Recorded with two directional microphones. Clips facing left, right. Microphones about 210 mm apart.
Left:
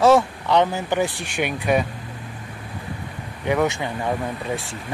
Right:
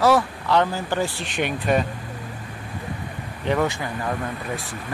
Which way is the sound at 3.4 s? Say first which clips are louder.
Left 2 dB; 10° left (ahead or behind).